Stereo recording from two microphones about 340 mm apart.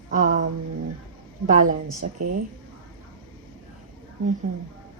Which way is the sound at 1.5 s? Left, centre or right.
Right.